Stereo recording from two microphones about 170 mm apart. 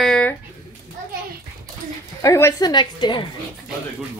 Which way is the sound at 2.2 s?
20° left (ahead or behind).